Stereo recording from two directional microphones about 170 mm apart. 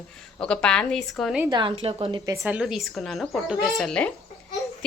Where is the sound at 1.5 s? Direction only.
30° right (ahead or behind).